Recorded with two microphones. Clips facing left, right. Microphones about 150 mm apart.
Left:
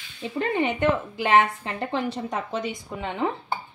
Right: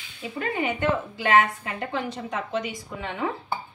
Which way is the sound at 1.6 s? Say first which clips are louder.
Left 2 dB; 30° left (ahead or behind).